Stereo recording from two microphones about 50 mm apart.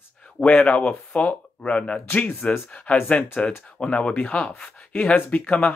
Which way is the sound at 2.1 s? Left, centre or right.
Left.